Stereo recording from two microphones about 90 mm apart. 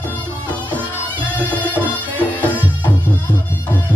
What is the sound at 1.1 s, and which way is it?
Music, 15° right (ahead or behind).